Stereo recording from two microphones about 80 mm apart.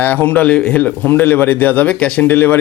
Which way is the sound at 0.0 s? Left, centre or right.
Left.